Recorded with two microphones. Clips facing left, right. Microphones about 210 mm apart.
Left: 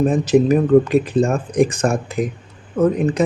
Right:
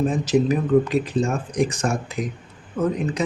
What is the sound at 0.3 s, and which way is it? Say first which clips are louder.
Speech: left 6 dB; 55° left (ahead or behind).